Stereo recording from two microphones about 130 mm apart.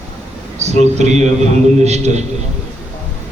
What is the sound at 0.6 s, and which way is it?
Speech, 60° right (ahead or behind).